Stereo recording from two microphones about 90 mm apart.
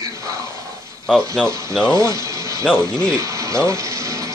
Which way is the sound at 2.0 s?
35° right (ahead or behind).